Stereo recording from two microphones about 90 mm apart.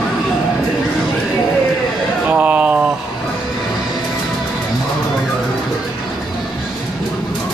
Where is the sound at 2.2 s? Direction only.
15° right (ahead or behind).